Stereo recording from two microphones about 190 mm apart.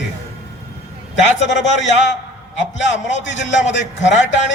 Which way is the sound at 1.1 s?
70° left (ahead or behind).